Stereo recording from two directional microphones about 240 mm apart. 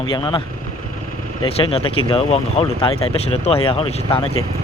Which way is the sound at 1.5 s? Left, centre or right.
Left.